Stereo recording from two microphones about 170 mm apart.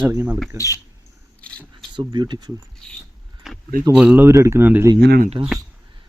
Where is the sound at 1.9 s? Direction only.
25° right (ahead or behind).